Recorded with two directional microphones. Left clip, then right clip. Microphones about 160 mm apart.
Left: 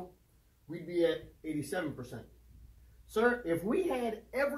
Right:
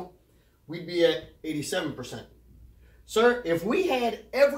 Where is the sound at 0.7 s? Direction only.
10° left (ahead or behind).